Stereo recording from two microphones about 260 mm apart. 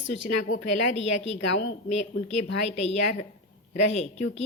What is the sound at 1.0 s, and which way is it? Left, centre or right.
A woman's voice, left.